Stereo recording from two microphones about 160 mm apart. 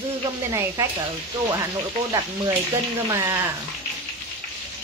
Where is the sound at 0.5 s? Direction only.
20° right (ahead or behind).